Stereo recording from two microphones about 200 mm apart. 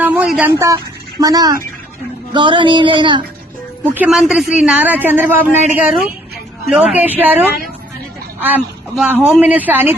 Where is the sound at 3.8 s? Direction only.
10° right (ahead or behind).